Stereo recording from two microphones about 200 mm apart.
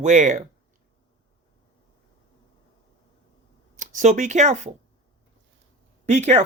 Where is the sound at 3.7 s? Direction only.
40° right (ahead or behind).